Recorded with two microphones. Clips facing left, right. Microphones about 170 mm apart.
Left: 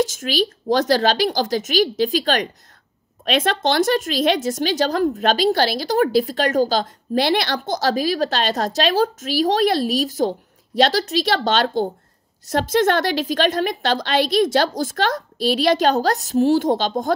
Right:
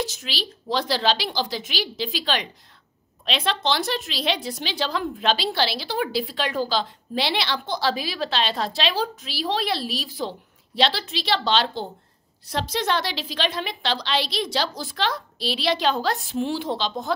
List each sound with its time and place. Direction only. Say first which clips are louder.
0.0 s a woman's voice: left 10 dB; 45° left (ahead or behind)